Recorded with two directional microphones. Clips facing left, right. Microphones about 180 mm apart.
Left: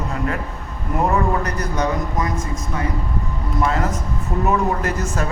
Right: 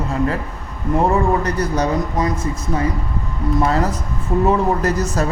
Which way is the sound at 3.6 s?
35° right (ahead or behind).